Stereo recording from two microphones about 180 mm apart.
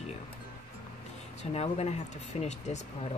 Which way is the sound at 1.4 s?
35° left (ahead or behind).